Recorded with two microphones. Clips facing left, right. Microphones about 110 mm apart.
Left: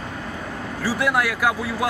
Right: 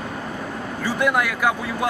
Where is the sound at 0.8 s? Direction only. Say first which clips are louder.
Right 1 dB; 5° left (ahead or behind).